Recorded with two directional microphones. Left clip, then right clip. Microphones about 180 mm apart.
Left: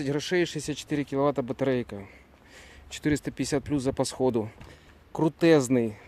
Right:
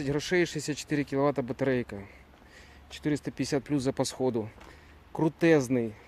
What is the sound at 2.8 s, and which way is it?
Speech, 35° left (ahead or behind).